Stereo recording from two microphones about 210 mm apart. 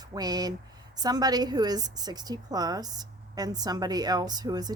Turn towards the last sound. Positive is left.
turn(degrees=-20)  # may be behind; listen again after turning